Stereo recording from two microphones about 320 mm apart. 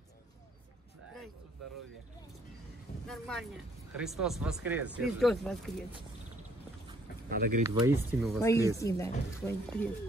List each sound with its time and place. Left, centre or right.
3.1 s speech: centre
7.2 s speech: right
7.6 s speech: centre